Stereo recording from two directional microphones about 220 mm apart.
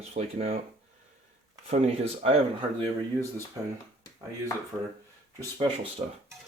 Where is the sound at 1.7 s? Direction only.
25° right (ahead or behind).